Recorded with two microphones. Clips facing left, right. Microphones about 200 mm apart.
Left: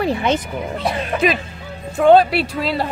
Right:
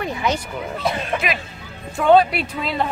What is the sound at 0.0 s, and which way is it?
Speech, 30° left (ahead or behind).